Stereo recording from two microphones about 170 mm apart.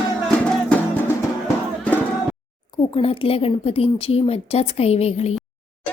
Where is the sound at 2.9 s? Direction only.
35° left (ahead or behind).